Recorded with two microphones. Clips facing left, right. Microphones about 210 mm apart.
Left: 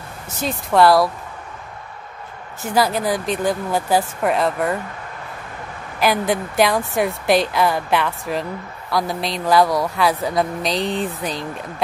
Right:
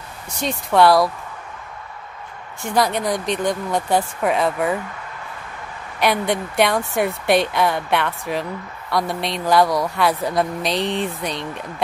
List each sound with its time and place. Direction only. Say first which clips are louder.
0.4 s speech: even; centre (ahead or behind)
2.6 s speech: left 1 dB; 5° left (ahead or behind)
5.9 s speech: left 1 dB; centre (ahead or behind)